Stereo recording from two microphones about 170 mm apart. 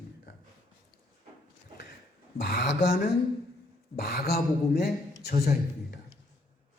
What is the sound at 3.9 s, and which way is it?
A man's voice, 65° left (ahead or behind).